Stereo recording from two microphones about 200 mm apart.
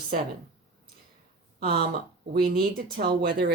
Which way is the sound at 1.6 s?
50° right (ahead or behind).